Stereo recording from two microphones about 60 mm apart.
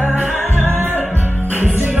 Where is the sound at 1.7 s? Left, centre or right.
Right.